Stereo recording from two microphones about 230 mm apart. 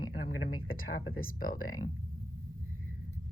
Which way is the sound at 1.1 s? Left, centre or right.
Left.